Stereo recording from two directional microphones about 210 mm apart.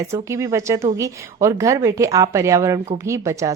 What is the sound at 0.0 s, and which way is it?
A woman's voice, 15° right (ahead or behind).